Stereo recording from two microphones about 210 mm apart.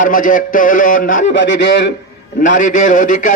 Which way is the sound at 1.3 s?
60° left (ahead or behind).